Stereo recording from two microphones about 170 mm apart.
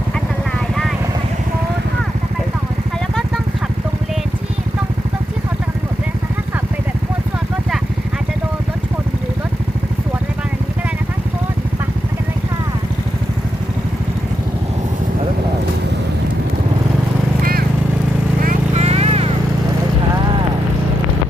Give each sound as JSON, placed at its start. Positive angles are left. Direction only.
{"t": 18.4, "sound": "vehicle", "side_deg": -40}